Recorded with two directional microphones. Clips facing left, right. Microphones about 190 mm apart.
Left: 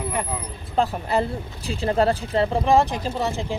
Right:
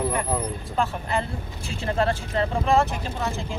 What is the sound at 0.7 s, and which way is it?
Speech, 35° left (ahead or behind).